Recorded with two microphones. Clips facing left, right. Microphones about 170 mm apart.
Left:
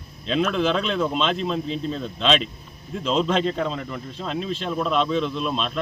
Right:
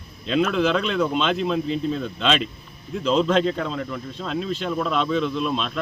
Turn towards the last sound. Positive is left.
turn(degrees=0)  # may be behind; listen again after turning